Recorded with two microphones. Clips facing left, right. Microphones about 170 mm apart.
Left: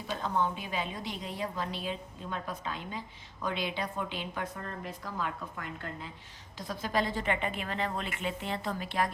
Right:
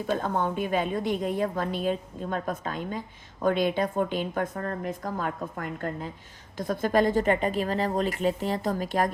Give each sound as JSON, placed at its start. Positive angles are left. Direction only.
{"t": 0.1, "sound": "a woman's voice", "side_deg": -50}